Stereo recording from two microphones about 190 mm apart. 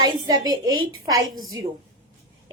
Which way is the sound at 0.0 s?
20° right (ahead or behind).